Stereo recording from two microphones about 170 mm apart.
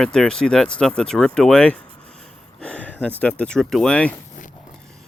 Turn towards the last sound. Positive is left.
turn(degrees=5)  # may be behind; listen again after turning